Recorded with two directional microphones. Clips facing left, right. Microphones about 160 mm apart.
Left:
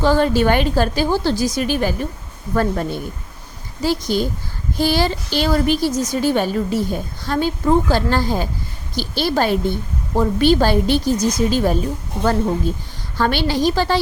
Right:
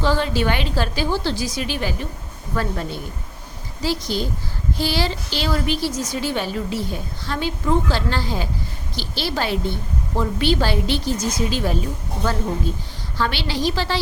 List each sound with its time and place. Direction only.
0.0 s a woman's voice: 45° left (ahead or behind)
13.1 s a woman's voice: 50° left (ahead or behind)